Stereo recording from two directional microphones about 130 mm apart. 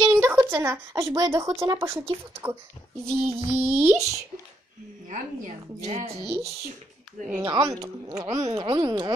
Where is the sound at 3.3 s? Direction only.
45° right (ahead or behind).